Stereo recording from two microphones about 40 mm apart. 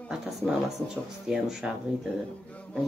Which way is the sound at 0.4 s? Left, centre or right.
Left.